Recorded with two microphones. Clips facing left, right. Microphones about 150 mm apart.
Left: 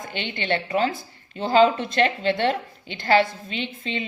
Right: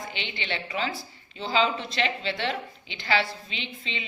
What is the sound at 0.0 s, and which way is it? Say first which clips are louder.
A woman's voice: left 5 dB; 50° left (ahead or behind).